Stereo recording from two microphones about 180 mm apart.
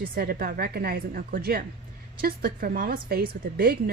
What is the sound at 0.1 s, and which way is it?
A woman's voice, 55° right (ahead or behind).